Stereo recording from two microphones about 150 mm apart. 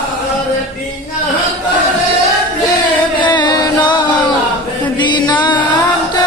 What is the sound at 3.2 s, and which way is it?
Music, 30° left (ahead or behind).